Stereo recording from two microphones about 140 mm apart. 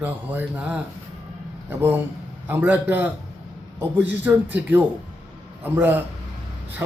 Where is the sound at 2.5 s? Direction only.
15° right (ahead or behind).